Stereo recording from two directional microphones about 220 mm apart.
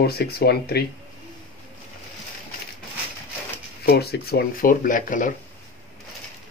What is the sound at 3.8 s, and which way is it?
Speech, 45° left (ahead or behind).